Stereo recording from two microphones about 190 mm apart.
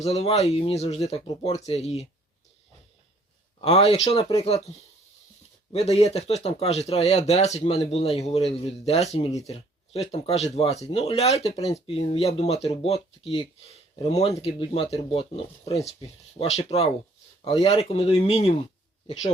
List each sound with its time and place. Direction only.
0.0 s speech: 30° left (ahead or behind)
3.6 s speech: 30° left (ahead or behind)
5.7 s speech: 35° left (ahead or behind)